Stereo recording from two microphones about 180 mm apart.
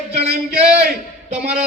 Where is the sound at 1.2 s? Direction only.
35° right (ahead or behind).